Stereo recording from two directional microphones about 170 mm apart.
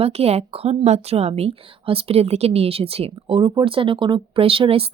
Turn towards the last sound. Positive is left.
turn(degrees=-35)  # may be behind; listen again after turning